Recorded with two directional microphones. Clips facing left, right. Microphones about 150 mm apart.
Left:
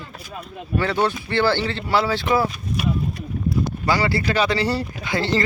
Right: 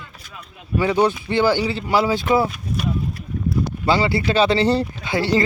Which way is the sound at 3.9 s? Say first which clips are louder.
Right 3 dB; 20° right (ahead or behind).